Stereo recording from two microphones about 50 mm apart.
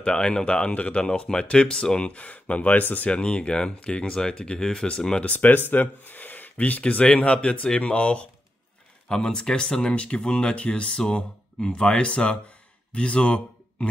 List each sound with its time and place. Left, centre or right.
0.0 s speech: centre; by 3.1 s left
3.1 s speech: left
5.2 s speech: left
6.5 s speech: left